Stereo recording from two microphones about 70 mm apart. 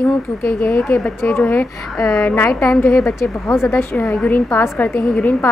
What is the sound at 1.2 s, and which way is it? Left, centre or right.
A woman's voice, left.